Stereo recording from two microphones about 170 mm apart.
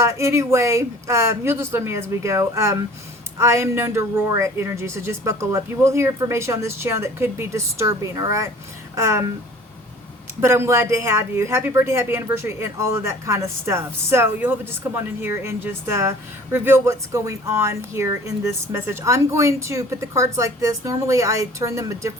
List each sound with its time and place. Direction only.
0.0 s a woman's voice: 15° right (ahead or behind)
10.4 s a woman's voice: 15° right (ahead or behind)